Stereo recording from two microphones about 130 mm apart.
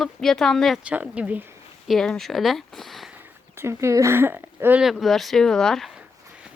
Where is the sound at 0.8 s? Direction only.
10° right (ahead or behind).